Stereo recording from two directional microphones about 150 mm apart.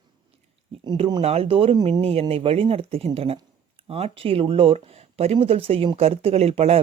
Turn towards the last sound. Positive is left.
turn(degrees=-40)  # may be behind; listen again after turning